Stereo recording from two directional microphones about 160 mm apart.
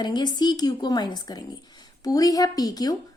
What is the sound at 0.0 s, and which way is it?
A woman's voice, 25° left (ahead or behind).